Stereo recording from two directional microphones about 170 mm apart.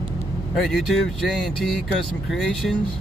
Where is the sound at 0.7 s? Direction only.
Centre (ahead or behind).